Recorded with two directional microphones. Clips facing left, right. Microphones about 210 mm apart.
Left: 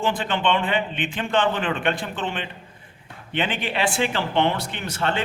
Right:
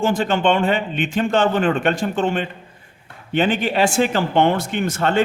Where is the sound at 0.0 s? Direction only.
45° right (ahead or behind).